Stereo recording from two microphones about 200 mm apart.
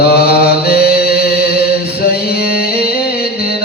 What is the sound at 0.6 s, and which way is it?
Chant, 50° left (ahead or behind).